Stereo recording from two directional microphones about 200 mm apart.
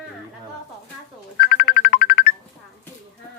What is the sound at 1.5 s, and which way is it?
Music, 45° left (ahead or behind).